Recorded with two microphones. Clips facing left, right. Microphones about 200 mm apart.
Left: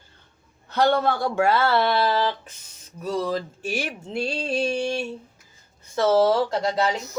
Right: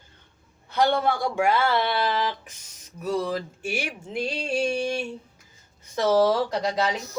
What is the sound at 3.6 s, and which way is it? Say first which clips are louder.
Speech: left 2 dB; 15° right (ahead or behind).